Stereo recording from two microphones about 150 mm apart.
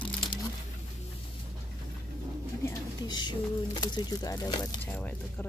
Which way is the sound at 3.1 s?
30° left (ahead or behind).